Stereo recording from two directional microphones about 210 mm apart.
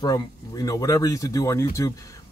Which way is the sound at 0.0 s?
20° left (ahead or behind).